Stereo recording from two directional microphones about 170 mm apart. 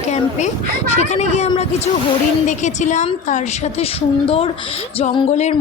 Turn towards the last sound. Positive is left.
turn(degrees=35)  # may be behind; listen again after turning